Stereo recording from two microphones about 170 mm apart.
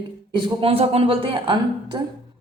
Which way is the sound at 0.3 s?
30° right (ahead or behind).